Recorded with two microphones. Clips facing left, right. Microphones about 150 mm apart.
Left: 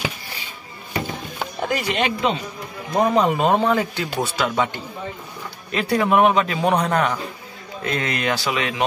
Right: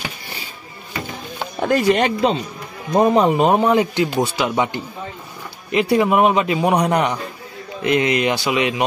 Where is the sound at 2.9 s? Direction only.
25° right (ahead or behind).